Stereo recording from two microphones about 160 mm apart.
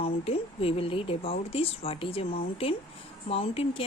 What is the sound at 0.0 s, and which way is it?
Speech, 35° left (ahead or behind).